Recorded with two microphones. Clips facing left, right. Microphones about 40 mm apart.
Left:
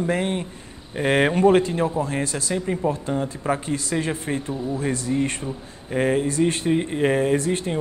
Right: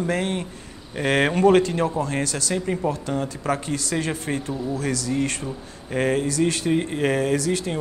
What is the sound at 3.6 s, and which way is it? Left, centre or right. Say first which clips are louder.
Speech: left 1 dB; right.